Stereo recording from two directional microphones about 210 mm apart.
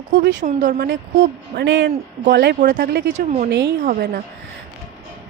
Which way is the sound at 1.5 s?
60° right (ahead or behind).